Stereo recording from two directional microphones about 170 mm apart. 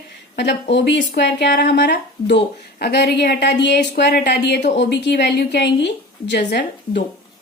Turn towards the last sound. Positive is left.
turn(degrees=75)  # may be behind; listen again after turning